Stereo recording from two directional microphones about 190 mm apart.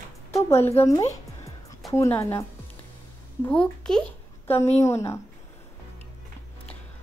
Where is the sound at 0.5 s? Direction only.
35° left (ahead or behind).